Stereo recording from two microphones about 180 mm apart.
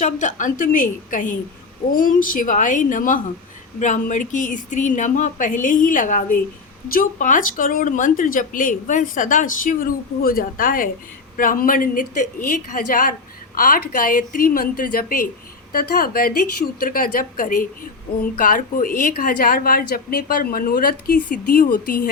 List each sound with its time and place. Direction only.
0.0 s a woman's voice: 45° left (ahead or behind)